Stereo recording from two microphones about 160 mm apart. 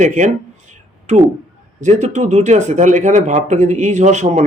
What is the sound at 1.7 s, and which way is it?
Speech, 45° right (ahead or behind).